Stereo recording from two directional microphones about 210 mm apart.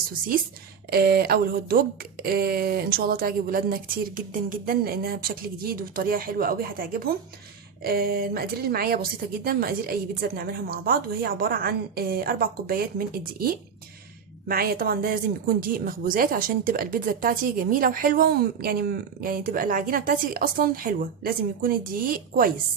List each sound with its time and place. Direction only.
0.9 s speech: 50° right (ahead or behind)